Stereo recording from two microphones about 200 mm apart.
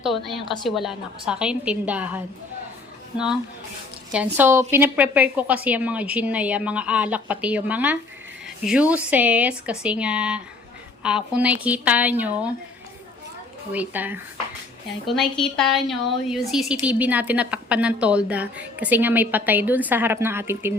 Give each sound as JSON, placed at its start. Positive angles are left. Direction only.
{"t": 0.0, "sound": "a woman's voice", "side_deg": 0}
{"t": 4.1, "sound": "a woman's voice", "side_deg": -10}
{"t": 13.7, "sound": "a woman's voice", "side_deg": -10}